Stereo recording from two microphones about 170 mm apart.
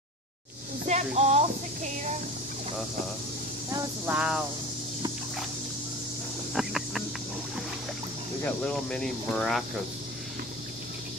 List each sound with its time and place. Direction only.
0.8 s speech: 45° right (ahead or behind)
3.7 s speech: 10° right (ahead or behind)
6.5 s a sound: centre (ahead or behind)
8.5 s speech: 5° left (ahead or behind)